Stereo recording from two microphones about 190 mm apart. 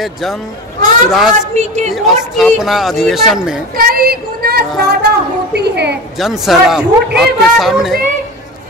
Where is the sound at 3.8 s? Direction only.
50° right (ahead or behind).